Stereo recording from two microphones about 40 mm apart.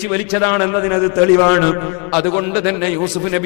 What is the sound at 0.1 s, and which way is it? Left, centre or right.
A man's voice, centre.